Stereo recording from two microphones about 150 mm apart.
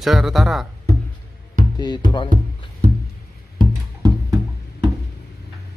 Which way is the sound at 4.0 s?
25° right (ahead or behind).